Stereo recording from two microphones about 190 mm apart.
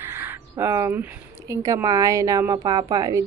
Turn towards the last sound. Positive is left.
turn(degrees=-20)  # may be behind; listen again after turning